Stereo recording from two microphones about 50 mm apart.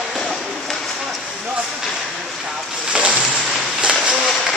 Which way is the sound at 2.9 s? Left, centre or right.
Right.